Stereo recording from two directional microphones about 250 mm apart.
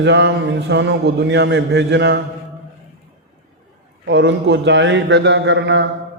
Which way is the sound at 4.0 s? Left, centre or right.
Right.